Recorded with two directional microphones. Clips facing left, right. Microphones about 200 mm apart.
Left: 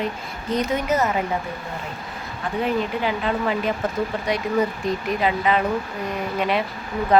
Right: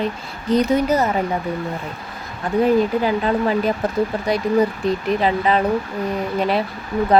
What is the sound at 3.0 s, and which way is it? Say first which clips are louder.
Speech: right 4 dB; 40° right (ahead or behind).